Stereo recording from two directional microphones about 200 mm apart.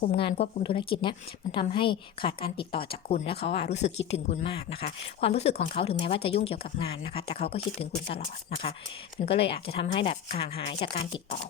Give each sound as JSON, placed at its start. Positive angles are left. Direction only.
{"t": 0.1, "sound": "a woman's voice", "side_deg": 30}